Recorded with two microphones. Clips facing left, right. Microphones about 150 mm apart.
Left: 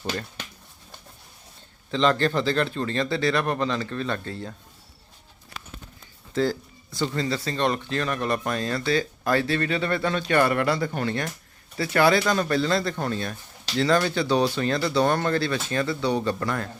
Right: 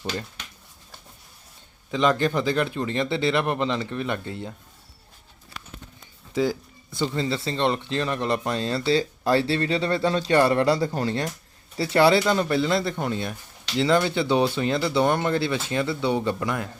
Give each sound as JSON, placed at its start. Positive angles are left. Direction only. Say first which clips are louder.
{"t": 1.9, "sound": "speech", "louder": "even", "side_deg": -10}
{"t": 6.3, "sound": "speech", "louder": "even", "side_deg": -10}